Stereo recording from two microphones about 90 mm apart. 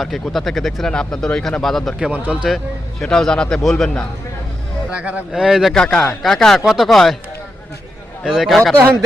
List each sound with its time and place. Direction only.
0.0 s speech: centre (ahead or behind)
2.2 s a man's voice: 15° right (ahead or behind)
3.0 s speech: 5° left (ahead or behind)
4.9 s a man's voice: 15° right (ahead or behind)
5.3 s speech: 5° right (ahead or behind)
8.2 s speech: 5° right (ahead or behind)